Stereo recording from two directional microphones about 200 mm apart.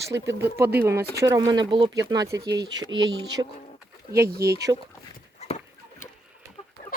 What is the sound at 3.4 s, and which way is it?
Speech, 30° right (ahead or behind).